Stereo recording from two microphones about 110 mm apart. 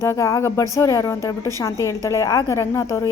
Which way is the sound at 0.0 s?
25° left (ahead or behind).